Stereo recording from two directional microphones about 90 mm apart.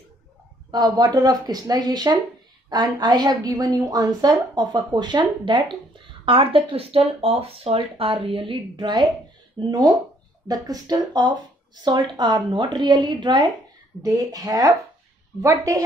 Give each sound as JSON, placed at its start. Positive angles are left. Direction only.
{"t": 0.7, "sound": "a woman's voice", "side_deg": -50}
{"t": 6.2, "sound": "a woman's voice", "side_deg": -85}
{"t": 12.0, "sound": "a woman's voice", "side_deg": -55}
{"t": 14.0, "sound": "a woman's voice", "side_deg": -45}